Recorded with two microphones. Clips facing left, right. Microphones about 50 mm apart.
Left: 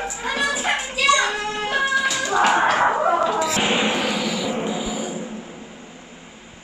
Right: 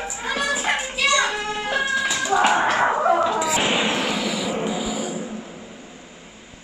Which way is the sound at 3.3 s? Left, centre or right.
Centre.